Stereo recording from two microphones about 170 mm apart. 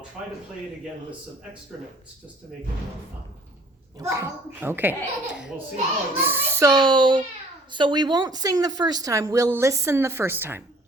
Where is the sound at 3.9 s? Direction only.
15° right (ahead or behind).